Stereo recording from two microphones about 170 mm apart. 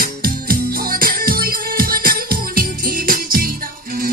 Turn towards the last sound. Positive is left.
turn(degrees=-60)  # may be behind; listen again after turning